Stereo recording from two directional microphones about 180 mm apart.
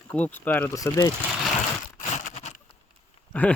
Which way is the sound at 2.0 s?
40° left (ahead or behind).